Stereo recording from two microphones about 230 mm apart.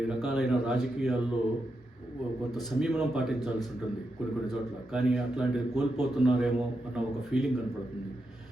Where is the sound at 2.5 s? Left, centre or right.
Centre.